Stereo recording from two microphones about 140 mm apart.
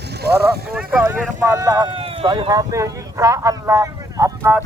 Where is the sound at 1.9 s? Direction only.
40° right (ahead or behind).